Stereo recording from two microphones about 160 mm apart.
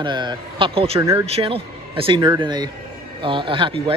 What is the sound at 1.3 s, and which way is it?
Speech, 35° right (ahead or behind).